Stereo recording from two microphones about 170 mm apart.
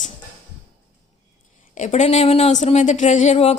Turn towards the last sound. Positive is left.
turn(degrees=40)  # may be behind; listen again after turning